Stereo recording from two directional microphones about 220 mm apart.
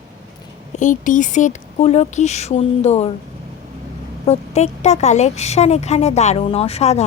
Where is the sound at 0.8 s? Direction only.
35° left (ahead or behind).